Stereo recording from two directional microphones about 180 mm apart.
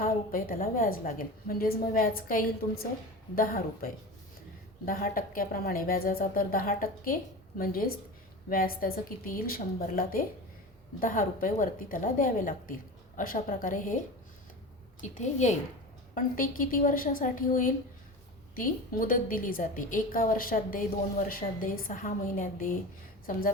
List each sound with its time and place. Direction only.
0.0 s a woman's voice: 50° left (ahead or behind)
15.2 s a woman's voice: 40° left (ahead or behind)